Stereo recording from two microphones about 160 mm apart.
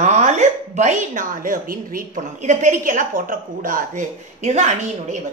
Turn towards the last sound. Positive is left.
turn(degrees=-45)  # may be behind; listen again after turning